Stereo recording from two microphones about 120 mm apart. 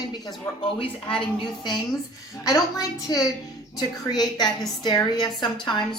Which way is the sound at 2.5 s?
30° left (ahead or behind).